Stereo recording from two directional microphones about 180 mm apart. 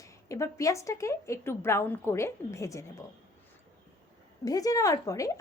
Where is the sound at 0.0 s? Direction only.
15° left (ahead or behind).